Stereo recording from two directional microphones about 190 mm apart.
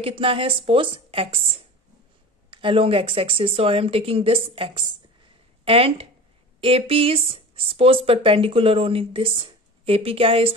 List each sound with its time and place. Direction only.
0.0 s speech: 30° right (ahead or behind)